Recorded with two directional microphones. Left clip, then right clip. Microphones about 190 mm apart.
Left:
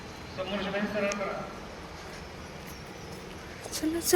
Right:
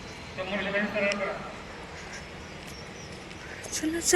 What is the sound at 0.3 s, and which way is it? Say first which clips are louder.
Speech: right 3 dB; 65° left (ahead or behind).